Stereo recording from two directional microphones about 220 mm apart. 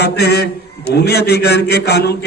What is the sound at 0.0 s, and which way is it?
A man's voice, 50° left (ahead or behind).